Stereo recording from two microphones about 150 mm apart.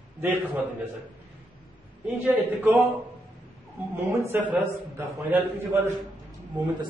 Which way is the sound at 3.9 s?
15° right (ahead or behind).